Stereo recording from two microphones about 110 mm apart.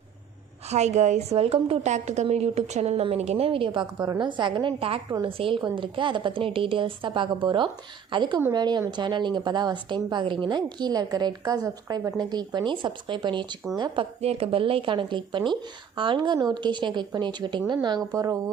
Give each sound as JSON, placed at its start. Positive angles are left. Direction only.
{"t": 0.7, "sound": "a woman's voice", "side_deg": -90}
{"t": 2.3, "sound": "a woman's voice", "side_deg": -75}
{"t": 3.9, "sound": "a woman's voice", "side_deg": -40}
{"t": 14.0, "sound": "a woman's voice", "side_deg": -65}
{"t": 18.1, "sound": "a woman's voice", "side_deg": -30}